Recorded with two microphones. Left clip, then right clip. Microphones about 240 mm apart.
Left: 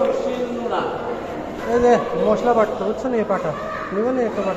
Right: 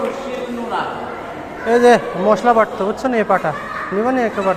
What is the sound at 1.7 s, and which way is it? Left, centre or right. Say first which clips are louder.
A man's voice: right 5 dB; right.